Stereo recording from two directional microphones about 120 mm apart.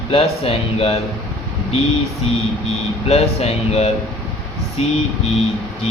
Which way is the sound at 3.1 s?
60° left (ahead or behind).